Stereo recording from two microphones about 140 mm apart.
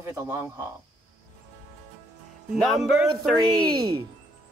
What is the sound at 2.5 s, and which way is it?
Speech, centre (ahead or behind).